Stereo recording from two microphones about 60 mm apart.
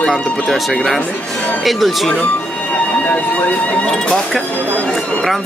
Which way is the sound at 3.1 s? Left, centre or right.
Left.